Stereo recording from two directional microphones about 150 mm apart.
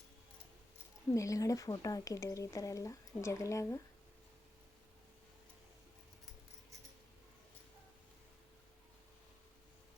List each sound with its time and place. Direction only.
1.1 s speech: 20° left (ahead or behind)